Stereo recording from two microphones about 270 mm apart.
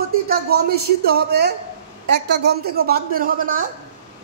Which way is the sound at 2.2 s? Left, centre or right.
Right.